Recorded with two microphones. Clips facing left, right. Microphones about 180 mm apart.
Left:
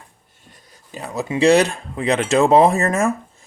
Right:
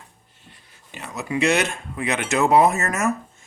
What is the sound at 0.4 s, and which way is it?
Speech, 40° left (ahead or behind).